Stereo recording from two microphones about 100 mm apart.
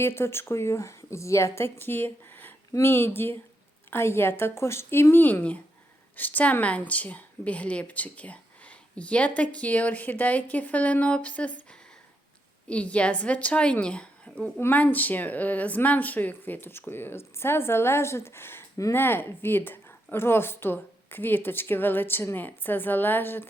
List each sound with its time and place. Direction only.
0.0 s speech: 25° left (ahead or behind)